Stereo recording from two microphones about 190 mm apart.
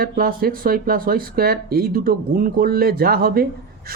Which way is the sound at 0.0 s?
50° right (ahead or behind).